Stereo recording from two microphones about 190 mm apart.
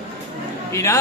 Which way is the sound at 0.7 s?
15° left (ahead or behind).